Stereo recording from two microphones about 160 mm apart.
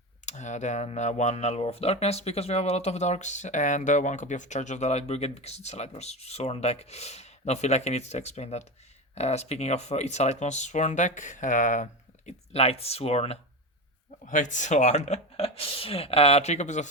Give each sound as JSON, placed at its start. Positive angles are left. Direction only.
{"t": 0.3, "sound": "speech", "side_deg": 50}
{"t": 14.3, "sound": "speech", "side_deg": 50}